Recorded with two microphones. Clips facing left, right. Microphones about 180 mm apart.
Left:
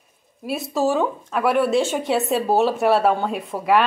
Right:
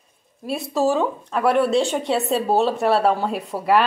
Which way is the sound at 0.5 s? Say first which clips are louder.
Right 1 dB; centre (ahead or behind).